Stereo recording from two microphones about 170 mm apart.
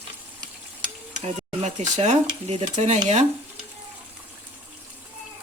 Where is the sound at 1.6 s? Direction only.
45° right (ahead or behind).